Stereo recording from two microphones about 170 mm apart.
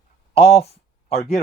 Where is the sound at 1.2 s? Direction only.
70° left (ahead or behind).